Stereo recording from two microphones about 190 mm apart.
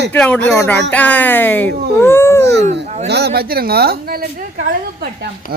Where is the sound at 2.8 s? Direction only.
40° right (ahead or behind).